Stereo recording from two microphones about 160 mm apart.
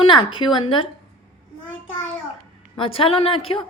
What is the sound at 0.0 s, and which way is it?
Speech, 30° left (ahead or behind).